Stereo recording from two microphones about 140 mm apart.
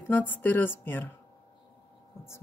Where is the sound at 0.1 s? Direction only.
15° left (ahead or behind).